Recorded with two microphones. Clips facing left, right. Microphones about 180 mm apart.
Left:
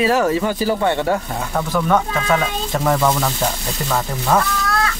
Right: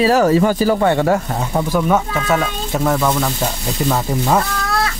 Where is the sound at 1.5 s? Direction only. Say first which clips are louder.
Right 1 dB; 10° right (ahead or behind).